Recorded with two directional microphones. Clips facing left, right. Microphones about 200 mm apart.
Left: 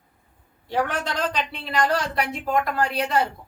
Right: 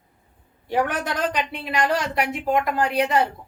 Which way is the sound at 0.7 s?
15° right (ahead or behind).